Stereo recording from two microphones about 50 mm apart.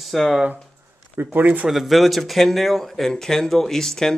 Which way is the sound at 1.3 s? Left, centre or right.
Right.